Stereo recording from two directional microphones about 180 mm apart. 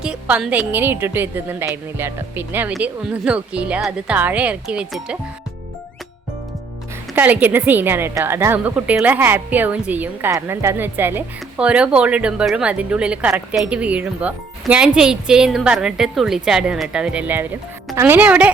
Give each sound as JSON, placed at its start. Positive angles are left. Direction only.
{"t": 0.0, "sound": "music", "side_deg": -5}
{"t": 0.7, "sound": "a woman's voice", "side_deg": -10}
{"t": 7.2, "sound": "a woman's voice", "side_deg": -10}